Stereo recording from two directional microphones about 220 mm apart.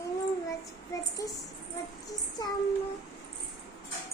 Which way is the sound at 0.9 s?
15° left (ahead or behind).